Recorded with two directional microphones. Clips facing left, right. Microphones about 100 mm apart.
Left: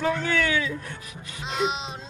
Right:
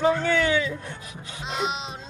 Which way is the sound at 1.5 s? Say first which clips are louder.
Left 2 dB; centre (ahead or behind).